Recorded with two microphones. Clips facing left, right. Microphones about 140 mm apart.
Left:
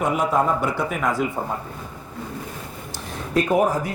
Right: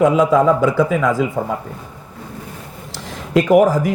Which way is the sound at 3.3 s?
90° right.